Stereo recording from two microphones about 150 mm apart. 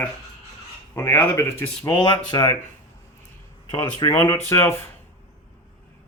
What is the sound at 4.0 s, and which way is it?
Speech, 20° left (ahead or behind).